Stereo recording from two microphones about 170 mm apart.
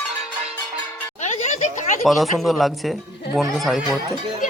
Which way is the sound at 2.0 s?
Centre (ahead or behind).